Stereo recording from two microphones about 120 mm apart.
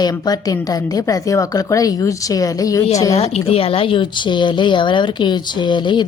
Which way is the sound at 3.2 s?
55° left (ahead or behind).